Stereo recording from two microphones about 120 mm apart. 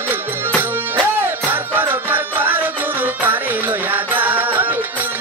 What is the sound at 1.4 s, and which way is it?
Music, 15° right (ahead or behind).